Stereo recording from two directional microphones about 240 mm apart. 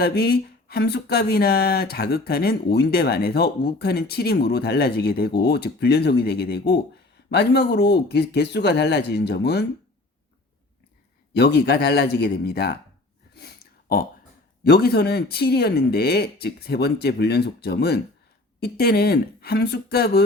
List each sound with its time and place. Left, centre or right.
0.0 s speech: left
11.3 s speech: left
13.3 s a sound: left
14.6 s speech: left